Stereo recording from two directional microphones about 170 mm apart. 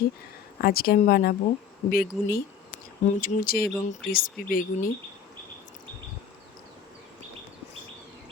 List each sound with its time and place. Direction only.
0.6 s speech: 60° left (ahead or behind)